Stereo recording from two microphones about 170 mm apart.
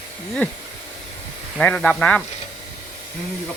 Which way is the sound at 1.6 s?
10° left (ahead or behind).